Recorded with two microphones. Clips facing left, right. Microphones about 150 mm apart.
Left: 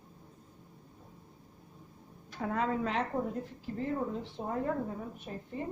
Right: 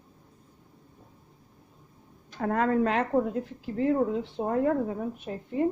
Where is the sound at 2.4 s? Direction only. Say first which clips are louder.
Right 7 dB; 60° right (ahead or behind); by 4.9 s 75° right (ahead or behind).